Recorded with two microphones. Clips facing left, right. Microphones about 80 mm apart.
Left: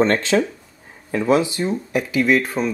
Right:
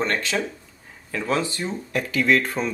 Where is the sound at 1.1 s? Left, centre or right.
Left.